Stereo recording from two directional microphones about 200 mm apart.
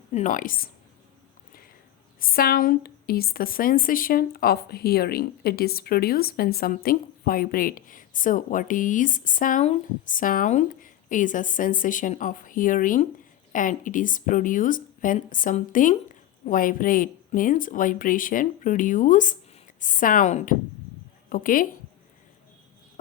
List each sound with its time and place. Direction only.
0.1 s a woman's voice: 40° left (ahead or behind)
2.1 s a woman's voice: 45° left (ahead or behind)